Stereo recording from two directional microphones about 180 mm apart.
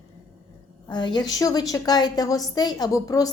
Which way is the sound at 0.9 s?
25° left (ahead or behind).